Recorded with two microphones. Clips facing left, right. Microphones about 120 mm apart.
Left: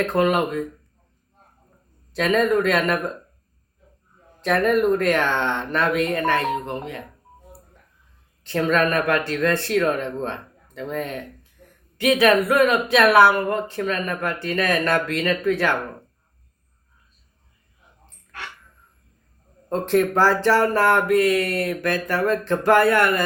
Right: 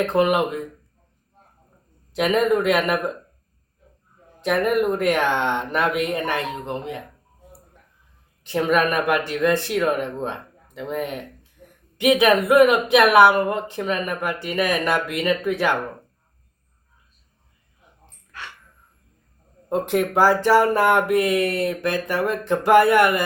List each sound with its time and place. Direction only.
0.0 s speech: 15° right (ahead or behind)
2.1 s speech: 15° right (ahead or behind)
4.4 s speech: 15° right (ahead or behind)
8.4 s speech: 15° right (ahead or behind)
19.7 s speech: 15° right (ahead or behind)